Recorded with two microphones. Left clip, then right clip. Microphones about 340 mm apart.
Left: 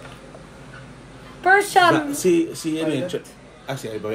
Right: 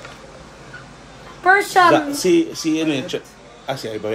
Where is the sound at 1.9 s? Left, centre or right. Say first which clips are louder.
Right 3 dB; centre.